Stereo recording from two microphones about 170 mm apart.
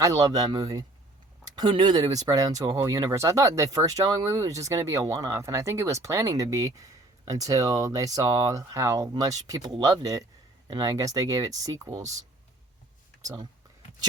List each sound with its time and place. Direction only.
0.0 s speech: 20° right (ahead or behind)
13.2 s speech: 20° right (ahead or behind)